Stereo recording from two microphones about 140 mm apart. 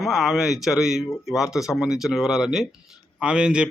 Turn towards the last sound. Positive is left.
turn(degrees=-5)  # may be behind; listen again after turning